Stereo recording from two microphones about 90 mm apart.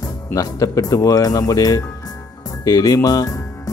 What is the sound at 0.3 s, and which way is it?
Speech, 40° left (ahead or behind).